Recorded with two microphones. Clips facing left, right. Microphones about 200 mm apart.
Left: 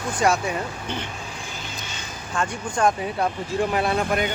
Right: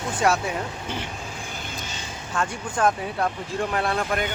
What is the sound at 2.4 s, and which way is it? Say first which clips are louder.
Speech: left 1 dB; centre (ahead or behind).